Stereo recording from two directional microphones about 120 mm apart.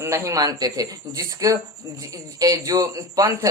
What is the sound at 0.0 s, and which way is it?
A man's voice, 25° right (ahead or behind).